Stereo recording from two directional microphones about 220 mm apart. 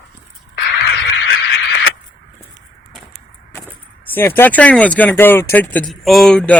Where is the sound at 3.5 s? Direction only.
10° left (ahead or behind).